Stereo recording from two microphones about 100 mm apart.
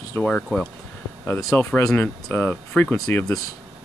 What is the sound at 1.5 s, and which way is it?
Speech, 25° left (ahead or behind).